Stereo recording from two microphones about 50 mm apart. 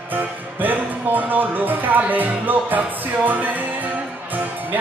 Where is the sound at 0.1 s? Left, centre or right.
Right.